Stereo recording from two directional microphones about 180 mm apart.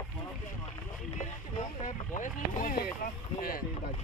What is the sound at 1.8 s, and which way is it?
Speech, 45° left (ahead or behind).